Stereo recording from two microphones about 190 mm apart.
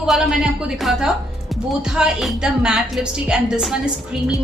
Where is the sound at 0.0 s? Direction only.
Centre (ahead or behind).